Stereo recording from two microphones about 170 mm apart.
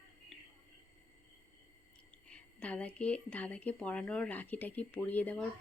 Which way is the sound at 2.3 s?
5° left (ahead or behind).